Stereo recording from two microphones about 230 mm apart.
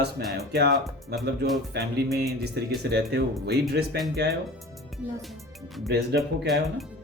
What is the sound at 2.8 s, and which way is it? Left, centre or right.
Speech, right.